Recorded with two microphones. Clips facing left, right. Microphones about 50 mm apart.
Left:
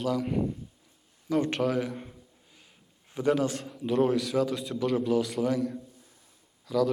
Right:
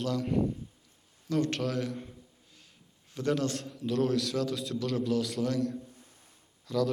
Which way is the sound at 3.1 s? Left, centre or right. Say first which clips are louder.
Left 4 dB; centre.